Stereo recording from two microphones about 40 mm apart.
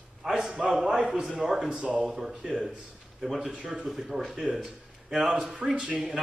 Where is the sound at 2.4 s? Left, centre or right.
Right.